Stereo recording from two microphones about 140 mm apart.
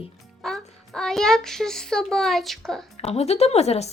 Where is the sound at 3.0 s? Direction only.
50° left (ahead or behind).